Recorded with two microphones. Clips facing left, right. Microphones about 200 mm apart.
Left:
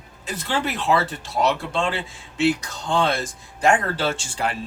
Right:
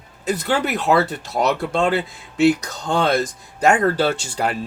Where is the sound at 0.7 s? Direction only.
40° right (ahead or behind).